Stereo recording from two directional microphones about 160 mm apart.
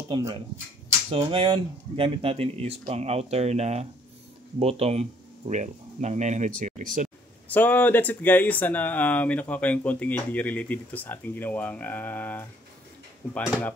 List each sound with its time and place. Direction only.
0.1 s speech: 25° right (ahead or behind); by 7.1 s 50° right (ahead or behind)
7.4 s speech: 10° left (ahead or behind)